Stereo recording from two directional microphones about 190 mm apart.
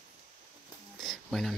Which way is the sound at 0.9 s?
Centre (ahead or behind).